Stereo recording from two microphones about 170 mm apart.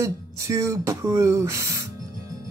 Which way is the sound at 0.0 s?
20° right (ahead or behind).